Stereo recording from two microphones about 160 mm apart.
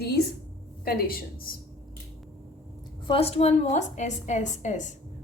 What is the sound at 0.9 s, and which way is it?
Speech, 70° left (ahead or behind).